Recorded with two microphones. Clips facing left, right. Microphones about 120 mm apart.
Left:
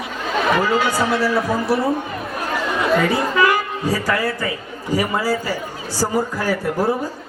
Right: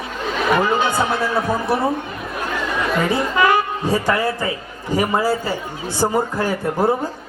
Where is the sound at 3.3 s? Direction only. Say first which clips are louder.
Right 1 dB; 25° right (ahead or behind).